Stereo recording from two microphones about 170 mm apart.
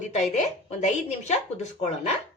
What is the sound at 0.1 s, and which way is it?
Speech, 40° left (ahead or behind).